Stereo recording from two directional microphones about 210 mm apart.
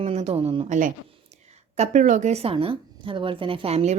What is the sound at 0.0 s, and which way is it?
A woman's voice, 30° right (ahead or behind).